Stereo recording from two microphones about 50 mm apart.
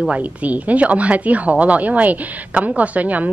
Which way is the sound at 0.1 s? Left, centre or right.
Right.